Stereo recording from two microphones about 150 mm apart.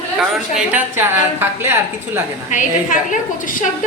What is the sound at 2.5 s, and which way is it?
A woman's voice, 60° left (ahead or behind).